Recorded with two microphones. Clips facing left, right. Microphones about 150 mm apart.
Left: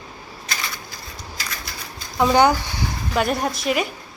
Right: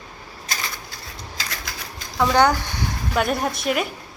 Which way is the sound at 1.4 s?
90° right.